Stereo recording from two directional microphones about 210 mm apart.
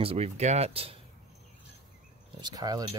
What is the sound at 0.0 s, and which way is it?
Speech, 30° right (ahead or behind).